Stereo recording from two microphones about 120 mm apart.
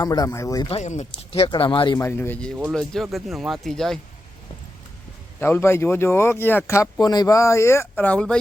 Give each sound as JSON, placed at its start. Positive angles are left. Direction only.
{"t": 0.0, "sound": "speech", "side_deg": 30}
{"t": 0.7, "sound": "speech", "side_deg": 75}
{"t": 1.5, "sound": "speech", "side_deg": 45}
{"t": 2.0, "sound": "a man's voice", "side_deg": 20}
{"t": 2.7, "sound": "speech", "side_deg": 0}
{"t": 5.4, "sound": "speech", "side_deg": 20}
{"t": 7.0, "sound": "speech", "side_deg": 35}
{"t": 7.9, "sound": "a man's voice", "side_deg": 10}